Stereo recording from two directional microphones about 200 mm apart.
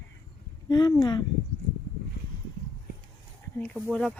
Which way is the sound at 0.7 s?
20° left (ahead or behind).